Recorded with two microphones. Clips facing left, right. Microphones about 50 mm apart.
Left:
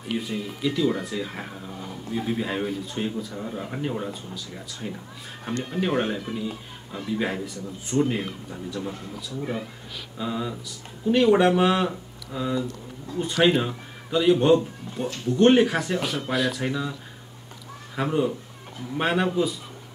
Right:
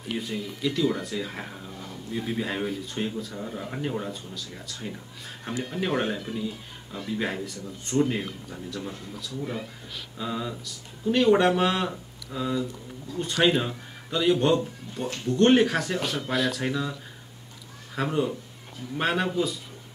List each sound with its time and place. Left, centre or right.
0.1 s a man's voice: centre
9.4 s speech: left
10.1 s a man's voice: centre